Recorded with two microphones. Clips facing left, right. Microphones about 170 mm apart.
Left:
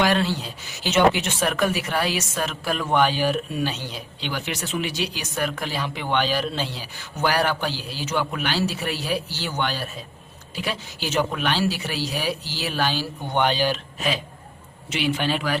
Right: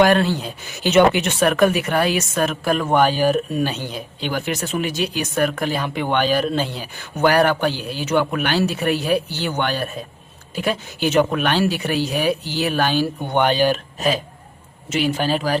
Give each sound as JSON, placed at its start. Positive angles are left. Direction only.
{"t": 0.0, "sound": "a man's voice", "side_deg": -50}